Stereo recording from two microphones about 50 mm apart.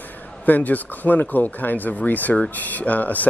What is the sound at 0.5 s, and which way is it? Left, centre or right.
Speech, left.